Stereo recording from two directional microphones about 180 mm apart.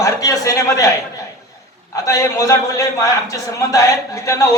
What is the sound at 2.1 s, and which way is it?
A man's voice, 20° left (ahead or behind).